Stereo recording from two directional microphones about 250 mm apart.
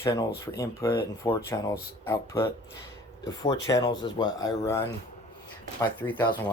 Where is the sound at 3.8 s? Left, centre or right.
Centre.